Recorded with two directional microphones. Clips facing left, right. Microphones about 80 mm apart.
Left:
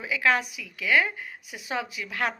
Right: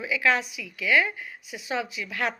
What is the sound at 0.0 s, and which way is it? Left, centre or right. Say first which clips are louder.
Speech: even; left.